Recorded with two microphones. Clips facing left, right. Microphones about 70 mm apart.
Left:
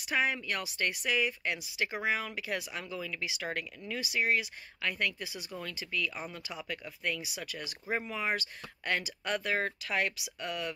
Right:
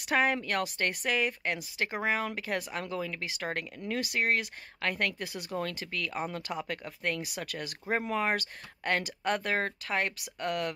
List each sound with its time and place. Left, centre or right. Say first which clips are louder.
0.0 s speech: right 4 dB; right